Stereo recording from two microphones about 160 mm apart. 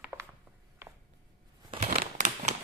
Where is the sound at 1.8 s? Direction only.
50° right (ahead or behind).